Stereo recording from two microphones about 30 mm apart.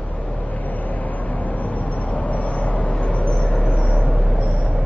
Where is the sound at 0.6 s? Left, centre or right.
Left.